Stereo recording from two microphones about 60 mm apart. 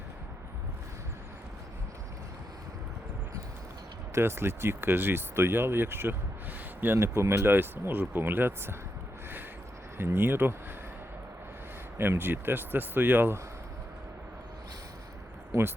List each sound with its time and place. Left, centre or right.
4.1 s speech: right
10.0 s speech: right
11.9 s speech: right